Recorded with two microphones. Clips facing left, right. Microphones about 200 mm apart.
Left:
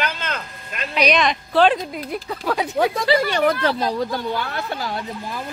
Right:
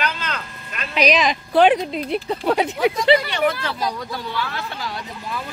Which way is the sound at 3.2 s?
40° left (ahead or behind).